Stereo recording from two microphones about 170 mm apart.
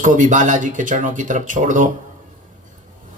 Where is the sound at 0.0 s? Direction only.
50° right (ahead or behind).